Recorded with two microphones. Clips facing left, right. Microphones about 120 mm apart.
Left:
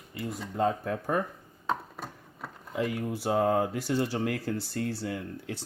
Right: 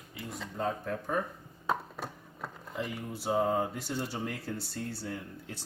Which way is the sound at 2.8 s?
90° left.